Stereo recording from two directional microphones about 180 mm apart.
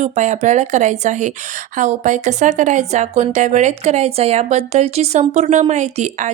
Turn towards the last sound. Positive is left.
turn(degrees=-40)  # may be behind; listen again after turning